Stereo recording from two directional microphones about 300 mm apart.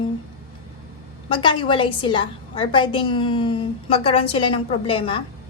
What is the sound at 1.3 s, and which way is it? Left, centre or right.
A woman's voice, centre.